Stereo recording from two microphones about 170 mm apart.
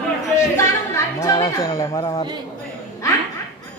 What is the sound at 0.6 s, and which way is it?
Speech, 20° left (ahead or behind).